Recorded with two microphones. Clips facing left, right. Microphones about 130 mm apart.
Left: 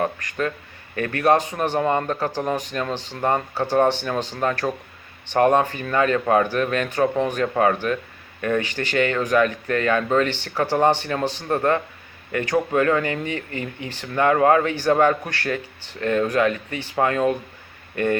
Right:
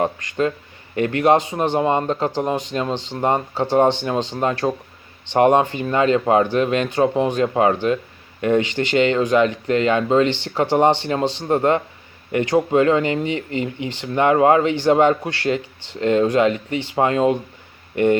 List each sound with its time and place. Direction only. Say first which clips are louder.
0.0 s speech: right 4 dB; 25° right (ahead or behind)